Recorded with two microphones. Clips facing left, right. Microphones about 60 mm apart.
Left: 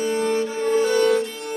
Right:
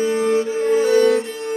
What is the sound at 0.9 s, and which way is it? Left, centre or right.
Music, right.